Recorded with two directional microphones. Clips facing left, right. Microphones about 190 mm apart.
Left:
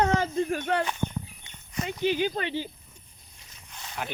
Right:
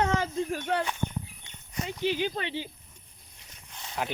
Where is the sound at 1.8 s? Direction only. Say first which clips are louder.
Left 3 dB; 50° left (ahead or behind).